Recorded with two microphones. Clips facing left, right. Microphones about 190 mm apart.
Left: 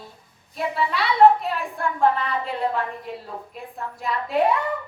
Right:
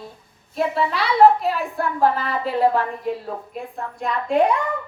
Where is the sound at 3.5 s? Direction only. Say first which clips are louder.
Right 4 dB; centre (ahead or behind).